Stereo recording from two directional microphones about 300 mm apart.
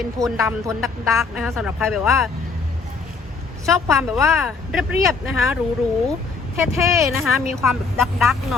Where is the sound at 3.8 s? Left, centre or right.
Centre.